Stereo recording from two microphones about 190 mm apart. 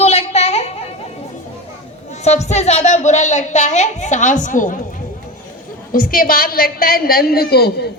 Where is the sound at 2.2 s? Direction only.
35° left (ahead or behind).